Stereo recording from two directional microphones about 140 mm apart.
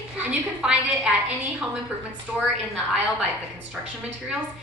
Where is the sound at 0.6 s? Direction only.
5° right (ahead or behind).